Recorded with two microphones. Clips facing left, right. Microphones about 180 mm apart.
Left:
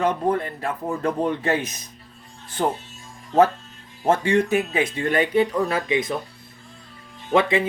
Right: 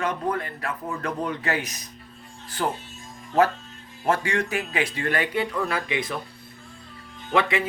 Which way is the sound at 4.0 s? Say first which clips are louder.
Left 5 dB; 20° left (ahead or behind).